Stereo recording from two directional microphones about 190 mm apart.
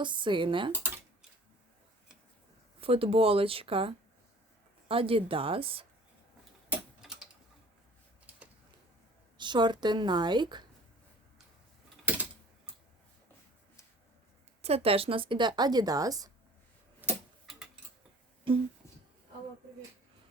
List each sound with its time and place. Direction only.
0.0 s speech: 25° right (ahead or behind)
2.8 s speech: 30° right (ahead or behind)
9.4 s speech: 25° right (ahead or behind)
14.6 s speech: 30° right (ahead or behind)
17.0 s tick-tock: 5° right (ahead or behind)
18.5 s speech: 25° right (ahead or behind)